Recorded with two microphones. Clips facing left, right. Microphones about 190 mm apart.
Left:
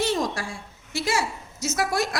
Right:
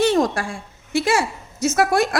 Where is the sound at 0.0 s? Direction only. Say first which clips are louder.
Right 7 dB; 60° right (ahead or behind).